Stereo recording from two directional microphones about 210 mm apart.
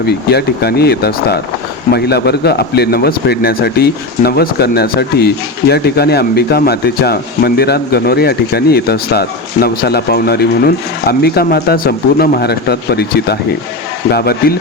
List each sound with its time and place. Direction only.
0.0 s a man's voice: 50° left (ahead or behind)